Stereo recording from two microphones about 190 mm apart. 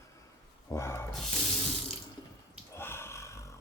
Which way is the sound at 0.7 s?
15° left (ahead or behind).